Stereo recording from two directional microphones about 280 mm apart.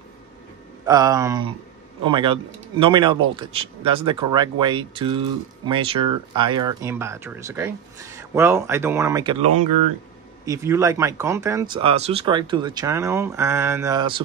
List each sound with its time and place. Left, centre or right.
0.8 s speech: centre